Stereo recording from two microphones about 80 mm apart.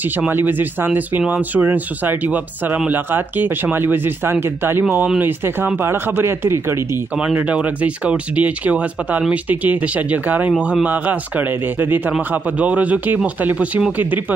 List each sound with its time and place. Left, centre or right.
0.3 s speech: right
7.2 s speech: centre